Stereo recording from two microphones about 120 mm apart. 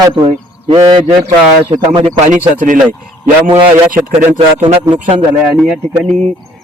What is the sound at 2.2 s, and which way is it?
Speech, 90° right.